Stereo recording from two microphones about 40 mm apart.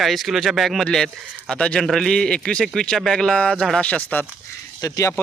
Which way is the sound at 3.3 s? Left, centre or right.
Left.